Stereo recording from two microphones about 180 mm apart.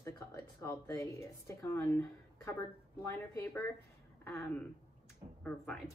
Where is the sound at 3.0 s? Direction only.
15° left (ahead or behind).